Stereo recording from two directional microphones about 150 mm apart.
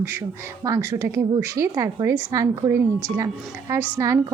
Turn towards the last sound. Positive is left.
turn(degrees=-15)  # may be behind; listen again after turning